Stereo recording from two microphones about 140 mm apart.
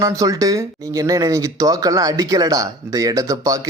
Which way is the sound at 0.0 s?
25° right (ahead or behind).